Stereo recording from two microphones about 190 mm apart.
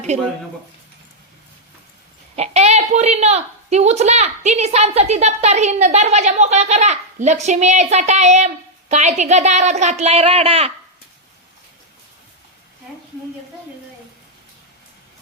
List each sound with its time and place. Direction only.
0.1 s a woman's voice: 35° right (ahead or behind)
2.3 s a woman's voice: 35° right (ahead or behind)